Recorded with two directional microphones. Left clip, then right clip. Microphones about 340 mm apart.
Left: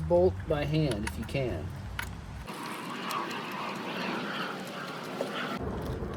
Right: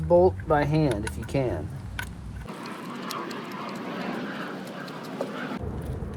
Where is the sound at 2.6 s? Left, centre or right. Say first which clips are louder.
Even; centre.